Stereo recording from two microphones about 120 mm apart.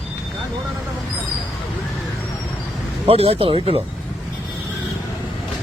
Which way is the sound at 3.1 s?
55° right (ahead or behind).